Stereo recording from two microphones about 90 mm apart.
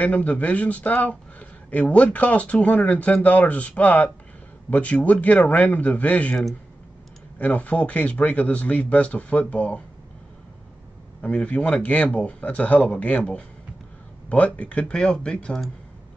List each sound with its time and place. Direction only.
0.0 s speech: 15° left (ahead or behind)
7.3 s speech: 15° left (ahead or behind)
11.1 s speech: 15° left (ahead or behind)